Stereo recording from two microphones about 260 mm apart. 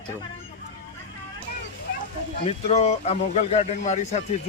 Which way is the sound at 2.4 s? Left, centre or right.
Left.